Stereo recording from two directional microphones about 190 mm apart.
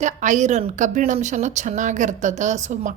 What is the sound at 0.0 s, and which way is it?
A woman's voice, 40° right (ahead or behind).